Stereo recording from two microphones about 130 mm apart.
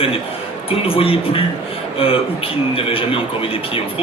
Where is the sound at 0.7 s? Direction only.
45° left (ahead or behind).